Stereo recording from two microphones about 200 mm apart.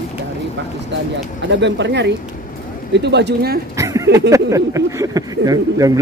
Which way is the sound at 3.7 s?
15° right (ahead or behind).